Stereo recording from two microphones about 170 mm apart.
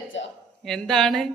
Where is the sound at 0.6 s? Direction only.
5° left (ahead or behind).